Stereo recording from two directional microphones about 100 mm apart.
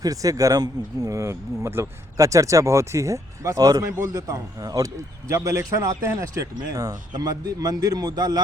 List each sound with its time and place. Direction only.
0.0 s speech: 35° right (ahead or behind)